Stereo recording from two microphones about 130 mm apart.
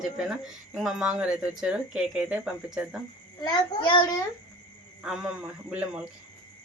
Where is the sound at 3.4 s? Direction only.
35° left (ahead or behind).